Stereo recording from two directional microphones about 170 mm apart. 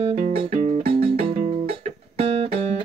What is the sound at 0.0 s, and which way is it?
Music, 40° right (ahead or behind).